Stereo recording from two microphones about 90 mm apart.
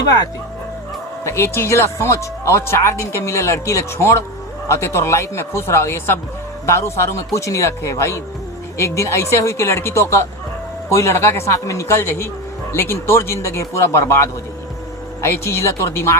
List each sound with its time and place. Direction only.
1.2 s speech: 30° left (ahead or behind)
15.3 s speech: 30° left (ahead or behind)